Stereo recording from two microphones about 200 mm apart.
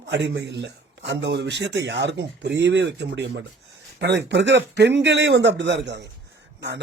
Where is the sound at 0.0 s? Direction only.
65° right (ahead or behind).